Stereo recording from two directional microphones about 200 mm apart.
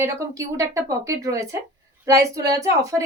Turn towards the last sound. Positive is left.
turn(degrees=-15)  # may be behind; listen again after turning